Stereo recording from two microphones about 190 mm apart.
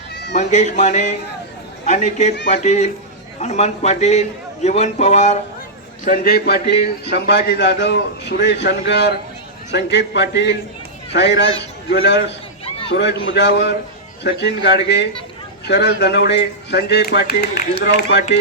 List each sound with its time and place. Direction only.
0.3 s a man's voice: 40° left (ahead or behind)
6.1 s a man's voice: 50° left (ahead or behind)